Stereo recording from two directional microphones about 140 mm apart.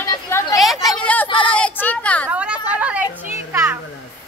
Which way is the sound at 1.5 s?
10° left (ahead or behind).